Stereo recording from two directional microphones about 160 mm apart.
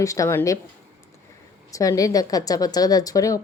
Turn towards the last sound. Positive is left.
turn(degrees=20)  # may be behind; listen again after turning